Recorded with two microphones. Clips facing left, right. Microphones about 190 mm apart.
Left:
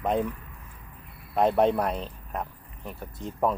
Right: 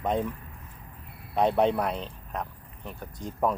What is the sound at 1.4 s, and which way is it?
Speech, 5° left (ahead or behind).